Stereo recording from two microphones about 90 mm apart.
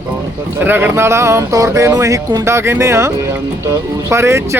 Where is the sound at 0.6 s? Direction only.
20° right (ahead or behind).